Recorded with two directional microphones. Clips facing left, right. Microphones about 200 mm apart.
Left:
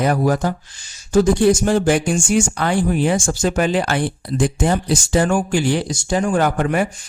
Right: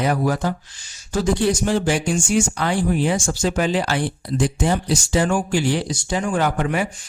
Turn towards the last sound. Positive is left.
turn(degrees=50)  # may be behind; listen again after turning